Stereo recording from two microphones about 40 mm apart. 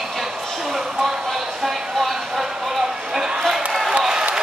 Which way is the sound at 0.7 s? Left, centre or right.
Centre.